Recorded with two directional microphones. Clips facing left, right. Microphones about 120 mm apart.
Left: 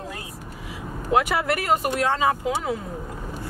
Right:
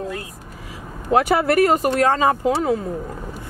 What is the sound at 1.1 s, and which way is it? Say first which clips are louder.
Speech: right 5 dB; 40° right (ahead or behind).